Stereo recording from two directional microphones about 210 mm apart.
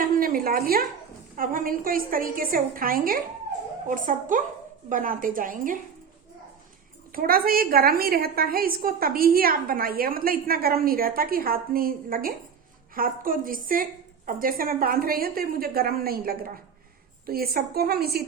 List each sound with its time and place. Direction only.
0.0 s a sound: 45° right (ahead or behind)
1.4 s a woman's voice: 40° right (ahead or behind)
7.1 s a woman's voice: 45° right (ahead or behind)